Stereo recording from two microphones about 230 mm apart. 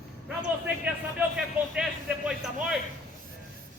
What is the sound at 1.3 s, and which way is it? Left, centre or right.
A man's voice, centre.